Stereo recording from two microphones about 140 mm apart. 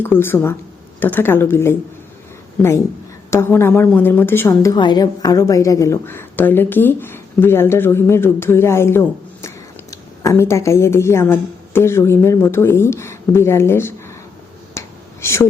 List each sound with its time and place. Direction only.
0.0 s a woman's voice: 15° left (ahead or behind)
4.8 s a woman's voice: 30° left (ahead or behind)
14.8 s finger snapping: 20° left (ahead or behind)